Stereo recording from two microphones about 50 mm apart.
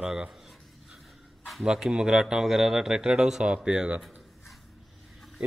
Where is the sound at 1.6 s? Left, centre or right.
Centre.